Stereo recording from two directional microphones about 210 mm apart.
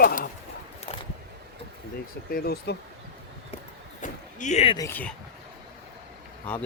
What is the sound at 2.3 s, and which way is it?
Speech, 50° left (ahead or behind).